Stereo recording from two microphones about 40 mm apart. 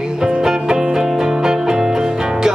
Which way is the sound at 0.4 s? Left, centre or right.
Centre.